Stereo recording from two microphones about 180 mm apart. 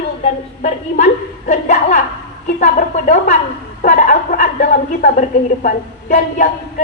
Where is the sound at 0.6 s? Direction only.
45° left (ahead or behind).